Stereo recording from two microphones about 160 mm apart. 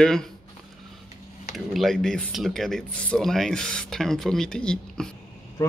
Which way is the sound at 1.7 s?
Centre (ahead or behind).